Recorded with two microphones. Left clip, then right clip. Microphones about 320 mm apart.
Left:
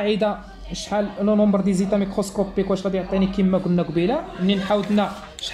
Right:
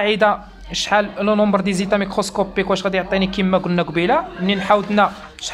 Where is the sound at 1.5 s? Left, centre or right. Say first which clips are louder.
Right 4 dB; right.